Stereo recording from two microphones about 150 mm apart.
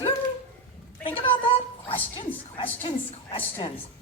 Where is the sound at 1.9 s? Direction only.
35° left (ahead or behind).